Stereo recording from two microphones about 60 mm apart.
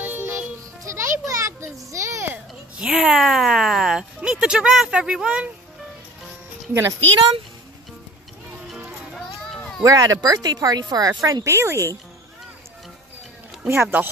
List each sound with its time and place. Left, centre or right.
0.0 s music: right
0.8 s children playing: right
2.8 s speech: centre
6.7 s speech: right
9.1 s run: centre
9.8 s speech: right
11.4 s speech: right
13.7 s speech: right